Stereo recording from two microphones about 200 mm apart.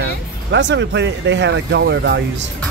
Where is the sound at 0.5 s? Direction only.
60° right (ahead or behind).